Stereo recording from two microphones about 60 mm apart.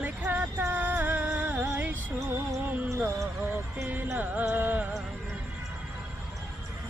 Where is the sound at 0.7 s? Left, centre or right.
Right.